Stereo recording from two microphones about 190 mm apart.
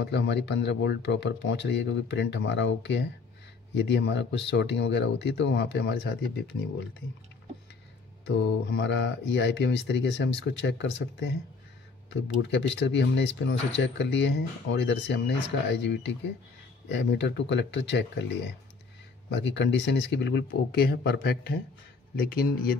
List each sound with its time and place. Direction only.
0.0 s speech: 65° left (ahead or behind)
8.3 s speech: 65° left (ahead or behind)
19.2 s speech: 70° left (ahead or behind)
22.1 s speech: 50° left (ahead or behind)